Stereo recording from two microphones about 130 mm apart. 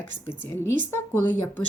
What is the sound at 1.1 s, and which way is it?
Speech, 15° left (ahead or behind).